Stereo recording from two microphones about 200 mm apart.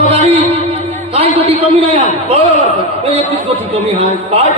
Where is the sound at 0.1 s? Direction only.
30° right (ahead or behind).